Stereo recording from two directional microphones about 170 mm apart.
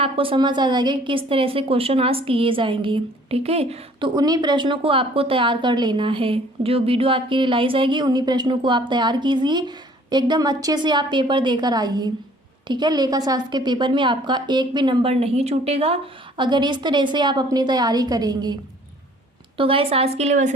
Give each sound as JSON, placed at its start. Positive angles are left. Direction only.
{"t": 0.0, "sound": "a woman's voice", "side_deg": -30}
{"t": 4.1, "sound": "a woman's voice", "side_deg": -20}
{"t": 16.4, "sound": "a woman's voice", "side_deg": -25}
{"t": 19.5, "sound": "a woman's voice", "side_deg": -30}